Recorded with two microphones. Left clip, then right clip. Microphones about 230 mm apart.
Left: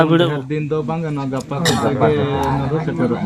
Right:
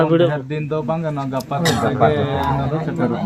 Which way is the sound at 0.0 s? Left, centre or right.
Left.